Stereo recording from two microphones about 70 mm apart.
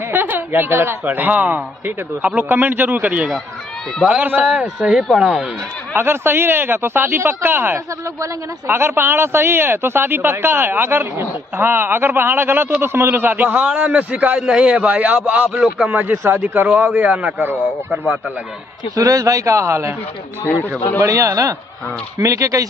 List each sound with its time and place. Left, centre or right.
0.1 s a woman's voice: right
4.5 s a man's voice: centre
5.9 s a woman's voice: right
13.5 s a man's voice: centre
18.9 s speech: right
21.0 s speech: right